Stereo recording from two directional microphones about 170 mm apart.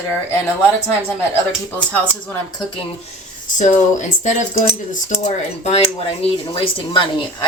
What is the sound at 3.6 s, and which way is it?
Speech, 45° left (ahead or behind).